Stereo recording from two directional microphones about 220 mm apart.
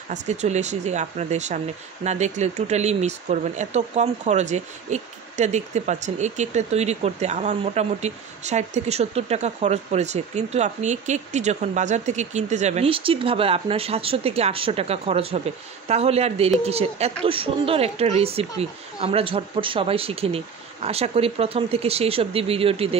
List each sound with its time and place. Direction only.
0.1 s a woman's voice: 30° right (ahead or behind)